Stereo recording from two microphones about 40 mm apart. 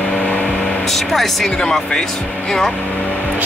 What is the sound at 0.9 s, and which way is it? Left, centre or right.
Speech, centre.